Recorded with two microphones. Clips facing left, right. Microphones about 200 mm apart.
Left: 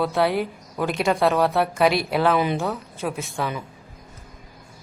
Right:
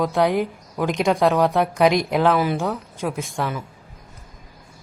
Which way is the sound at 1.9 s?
15° right (ahead or behind).